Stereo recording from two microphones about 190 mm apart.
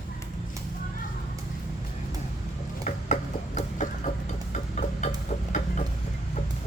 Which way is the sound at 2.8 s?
40° left (ahead or behind).